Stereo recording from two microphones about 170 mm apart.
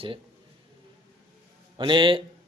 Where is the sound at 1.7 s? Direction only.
30° right (ahead or behind).